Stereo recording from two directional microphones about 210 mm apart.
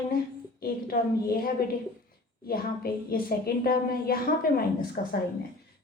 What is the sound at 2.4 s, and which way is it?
A woman's voice, 45° left (ahead or behind).